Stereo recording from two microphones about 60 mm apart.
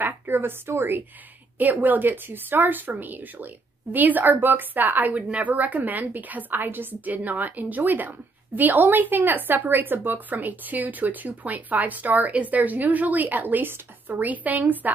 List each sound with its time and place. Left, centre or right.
0.0 s a woman's voice: right
1.6 s a woman's voice: right